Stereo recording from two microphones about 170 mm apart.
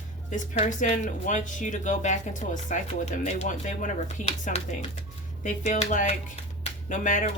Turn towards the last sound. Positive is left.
turn(degrees=45)  # may be behind; listen again after turning